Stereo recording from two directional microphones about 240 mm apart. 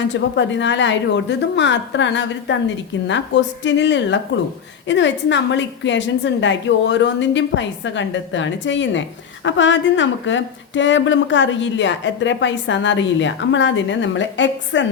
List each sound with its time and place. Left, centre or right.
0.1 s a woman's voice: left